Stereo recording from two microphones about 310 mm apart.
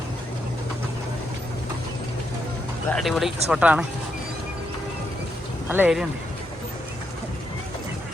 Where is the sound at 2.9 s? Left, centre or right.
Centre.